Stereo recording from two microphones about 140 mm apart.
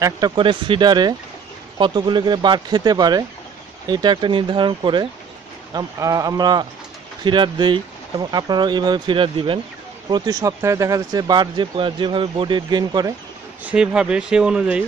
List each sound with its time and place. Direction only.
0.4 s speech: 35° right (ahead or behind)
13.7 s speech: 5° right (ahead or behind)